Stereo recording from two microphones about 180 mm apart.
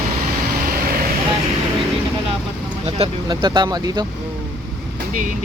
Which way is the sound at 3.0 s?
25° right (ahead or behind).